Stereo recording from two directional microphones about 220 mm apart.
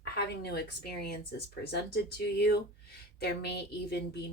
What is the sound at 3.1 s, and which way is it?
Speech, 45° left (ahead or behind).